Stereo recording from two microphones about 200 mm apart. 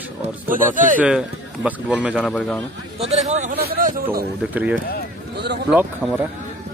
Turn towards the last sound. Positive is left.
turn(degrees=-10)  # may be behind; listen again after turning